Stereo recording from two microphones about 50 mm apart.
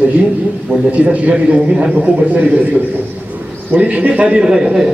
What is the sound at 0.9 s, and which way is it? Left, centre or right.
A man's voice, right.